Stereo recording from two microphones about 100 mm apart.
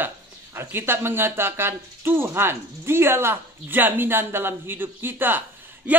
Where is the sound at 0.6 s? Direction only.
20° right (ahead or behind).